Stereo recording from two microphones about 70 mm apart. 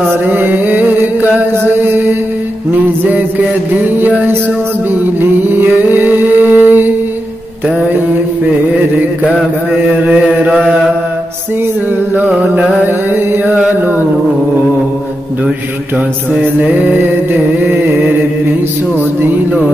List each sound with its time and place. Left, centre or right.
0.1 s mantra: right
5.0 s a sound: right
10.0 s chant: centre
12.1 s music: right
13.1 s mantra: right
13.6 s music: right
16.3 s music: right
18.9 s music: right